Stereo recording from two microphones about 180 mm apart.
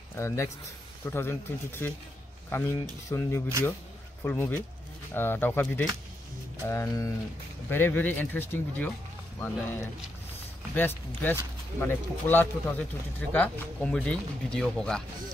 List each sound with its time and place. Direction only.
0.1 s a man's voice: 15° left (ahead or behind)